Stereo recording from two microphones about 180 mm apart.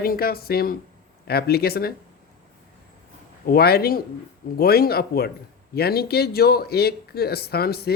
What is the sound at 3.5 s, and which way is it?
A man's voice, 60° left (ahead or behind).